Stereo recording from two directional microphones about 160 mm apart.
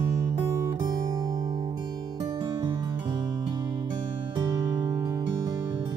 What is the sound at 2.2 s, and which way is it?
Music, 30° right (ahead or behind).